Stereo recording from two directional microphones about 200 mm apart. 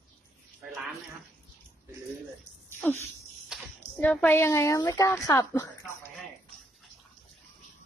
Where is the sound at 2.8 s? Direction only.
10° left (ahead or behind).